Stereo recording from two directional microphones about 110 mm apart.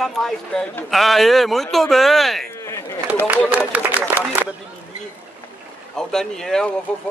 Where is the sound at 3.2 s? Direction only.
15° right (ahead or behind).